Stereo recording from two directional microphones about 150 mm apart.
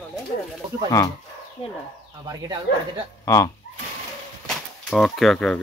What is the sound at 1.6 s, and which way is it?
Speech, 40° left (ahead or behind).